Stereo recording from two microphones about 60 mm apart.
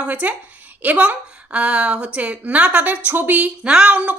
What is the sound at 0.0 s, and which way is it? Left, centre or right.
A woman's voice, right.